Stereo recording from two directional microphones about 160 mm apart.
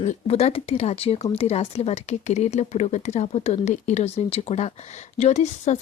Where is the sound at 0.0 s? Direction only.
45° left (ahead or behind).